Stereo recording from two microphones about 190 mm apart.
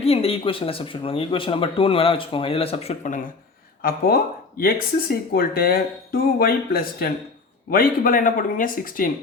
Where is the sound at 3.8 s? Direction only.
50° left (ahead or behind).